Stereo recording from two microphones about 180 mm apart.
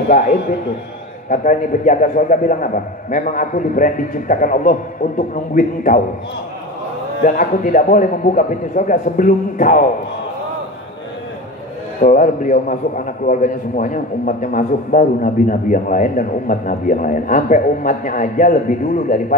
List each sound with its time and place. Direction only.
1.3 s a man's voice: 45° left (ahead or behind)
7.2 s a man's voice: 45° left (ahead or behind)
12.0 s a man's voice: 45° left (ahead or behind)